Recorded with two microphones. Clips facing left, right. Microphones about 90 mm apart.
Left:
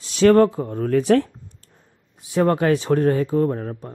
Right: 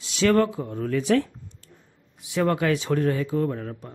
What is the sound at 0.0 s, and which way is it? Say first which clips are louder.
Speech: left 6 dB; 40° left (ahead or behind).